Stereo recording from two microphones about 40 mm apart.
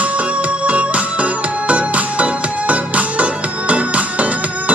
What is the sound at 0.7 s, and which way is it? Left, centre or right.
Music, right.